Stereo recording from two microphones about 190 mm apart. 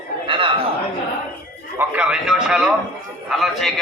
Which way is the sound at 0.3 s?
25° right (ahead or behind).